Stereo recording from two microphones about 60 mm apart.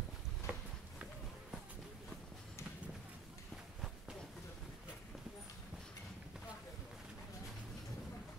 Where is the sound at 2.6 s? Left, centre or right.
Left.